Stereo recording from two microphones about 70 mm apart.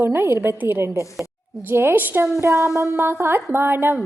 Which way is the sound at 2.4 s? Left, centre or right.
Right.